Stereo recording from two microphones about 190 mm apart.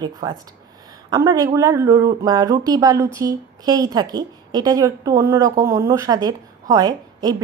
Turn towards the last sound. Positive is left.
turn(degrees=-20)  # may be behind; listen again after turning